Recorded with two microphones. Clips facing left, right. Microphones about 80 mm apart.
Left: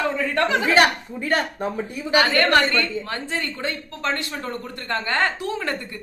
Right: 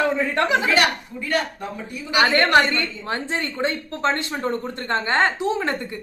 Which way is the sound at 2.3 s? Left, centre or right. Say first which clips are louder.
Right 1 dB; right.